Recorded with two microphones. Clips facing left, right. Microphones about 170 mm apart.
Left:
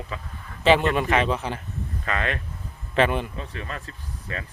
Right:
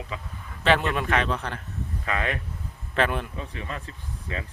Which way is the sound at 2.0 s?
15° right (ahead or behind).